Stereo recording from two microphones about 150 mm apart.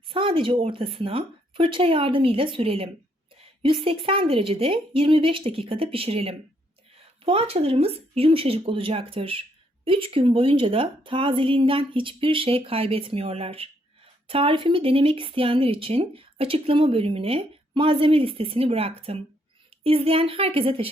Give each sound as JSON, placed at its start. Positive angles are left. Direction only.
{"t": 0.1, "sound": "speech", "side_deg": -35}